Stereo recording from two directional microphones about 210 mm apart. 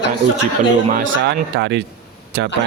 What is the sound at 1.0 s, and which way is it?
Speech, 55° right (ahead or behind).